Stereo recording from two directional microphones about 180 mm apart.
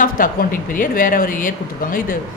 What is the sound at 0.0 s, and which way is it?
A woman's voice, 50° left (ahead or behind).